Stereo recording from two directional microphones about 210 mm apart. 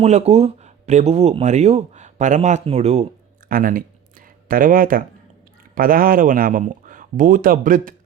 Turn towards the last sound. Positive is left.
turn(degrees=-40)  # may be behind; listen again after turning